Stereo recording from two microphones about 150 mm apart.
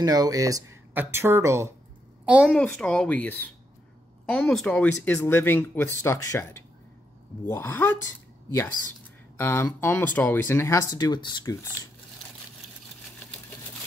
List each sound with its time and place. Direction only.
0.0 s a woman's voice: 25° right (ahead or behind)
2.4 s speech: 5° left (ahead or behind); by 11.5 s 30° left (ahead or behind)